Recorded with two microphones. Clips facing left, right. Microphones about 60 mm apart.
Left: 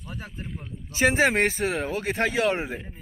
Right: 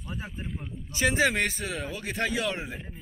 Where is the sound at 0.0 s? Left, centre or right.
Centre.